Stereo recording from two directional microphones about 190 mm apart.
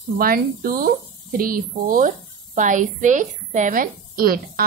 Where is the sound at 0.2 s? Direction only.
50° right (ahead or behind).